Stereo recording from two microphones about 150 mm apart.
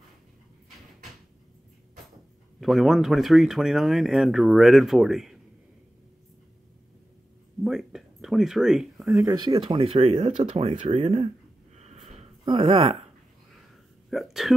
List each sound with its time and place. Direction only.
2.6 s speech: centre (ahead or behind)
7.6 s a sound: 5° right (ahead or behind)
9.1 s speech: 20° right (ahead or behind)
9.5 s speech: 35° right (ahead or behind)
12.4 s speech: 40° right (ahead or behind)
14.1 s speech: centre (ahead or behind)